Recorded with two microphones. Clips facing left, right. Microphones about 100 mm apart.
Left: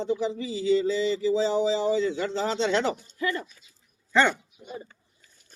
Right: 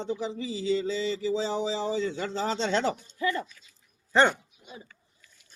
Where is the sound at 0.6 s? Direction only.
30° right (ahead or behind).